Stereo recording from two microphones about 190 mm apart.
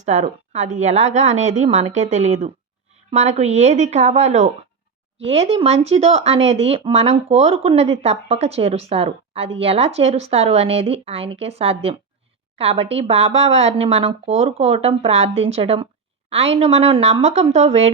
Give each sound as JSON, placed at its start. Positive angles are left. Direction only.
{"t": 0.0, "sound": "speech", "side_deg": -40}